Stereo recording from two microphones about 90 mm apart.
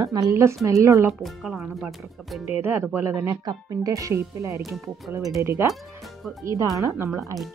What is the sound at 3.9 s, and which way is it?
Speech, 35° right (ahead or behind).